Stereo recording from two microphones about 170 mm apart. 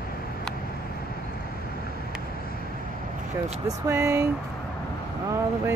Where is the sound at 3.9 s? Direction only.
15° right (ahead or behind).